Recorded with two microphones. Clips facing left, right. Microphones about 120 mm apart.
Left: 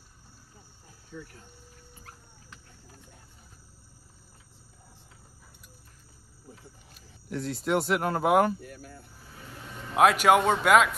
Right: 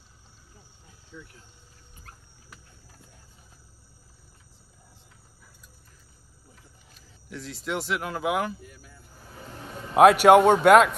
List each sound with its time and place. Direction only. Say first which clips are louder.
1.1 s speech: left 3 dB; 45° left (ahead or behind)
6.9 s speech: left 5 dB; 45° left (ahead or behind)
9.9 s a man's voice: right 6 dB; centre (ahead or behind)